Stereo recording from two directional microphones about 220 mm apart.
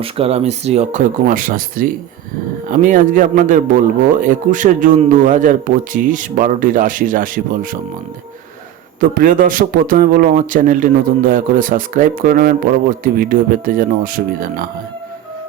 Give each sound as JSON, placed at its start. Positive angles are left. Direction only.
{"t": 0.0, "sound": "speech", "side_deg": -25}
{"t": 9.0, "sound": "speech", "side_deg": -35}